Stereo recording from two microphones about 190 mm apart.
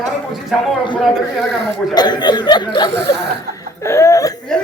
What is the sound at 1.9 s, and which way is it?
Speech, 20° left (ahead or behind).